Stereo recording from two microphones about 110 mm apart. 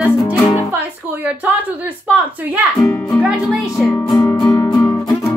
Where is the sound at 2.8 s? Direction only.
25° left (ahead or behind).